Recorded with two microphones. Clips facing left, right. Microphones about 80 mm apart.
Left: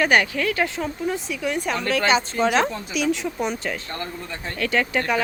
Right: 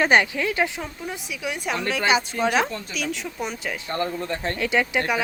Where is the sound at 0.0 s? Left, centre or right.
Right.